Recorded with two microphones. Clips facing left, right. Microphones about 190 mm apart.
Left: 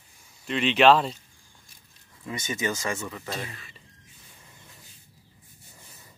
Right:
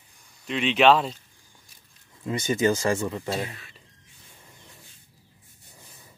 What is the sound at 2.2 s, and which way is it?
Speech, 30° right (ahead or behind).